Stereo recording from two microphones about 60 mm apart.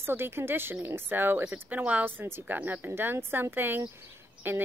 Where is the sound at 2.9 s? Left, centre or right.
Right.